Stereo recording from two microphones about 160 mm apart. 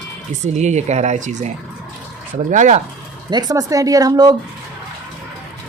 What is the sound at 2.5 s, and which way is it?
Speech, 50° right (ahead or behind).